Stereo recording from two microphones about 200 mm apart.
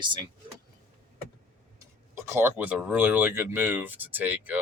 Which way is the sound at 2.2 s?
10° right (ahead or behind).